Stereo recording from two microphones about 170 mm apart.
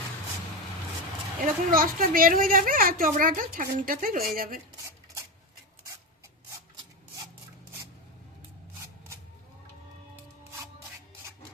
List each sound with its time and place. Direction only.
1.4 s a woman's voice: 55° right (ahead or behind)